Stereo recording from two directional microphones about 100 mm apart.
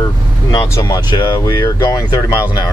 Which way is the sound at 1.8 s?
30° left (ahead or behind).